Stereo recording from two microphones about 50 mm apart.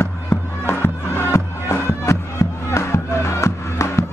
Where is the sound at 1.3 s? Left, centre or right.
Left.